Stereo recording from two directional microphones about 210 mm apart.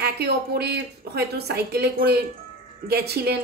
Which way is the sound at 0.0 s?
50° right (ahead or behind).